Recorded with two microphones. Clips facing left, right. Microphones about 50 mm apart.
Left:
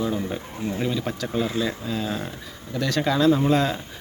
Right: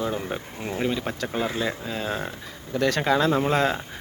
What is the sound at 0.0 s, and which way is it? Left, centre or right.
Speech, right.